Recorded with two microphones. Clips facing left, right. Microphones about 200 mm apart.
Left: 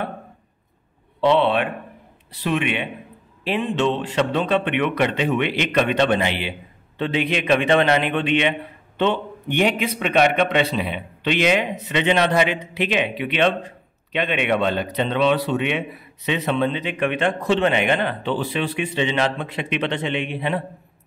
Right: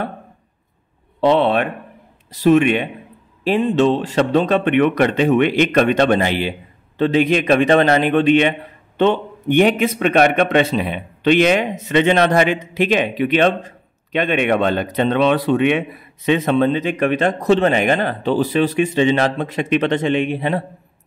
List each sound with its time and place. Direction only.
1.2 s a man's voice: 45° right (ahead or behind)